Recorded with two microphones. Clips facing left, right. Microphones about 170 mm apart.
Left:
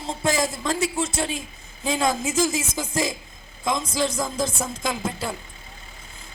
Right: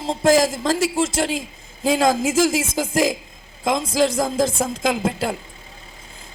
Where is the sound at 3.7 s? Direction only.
90° right.